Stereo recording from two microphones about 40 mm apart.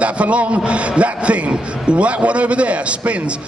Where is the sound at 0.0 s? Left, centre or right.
Right.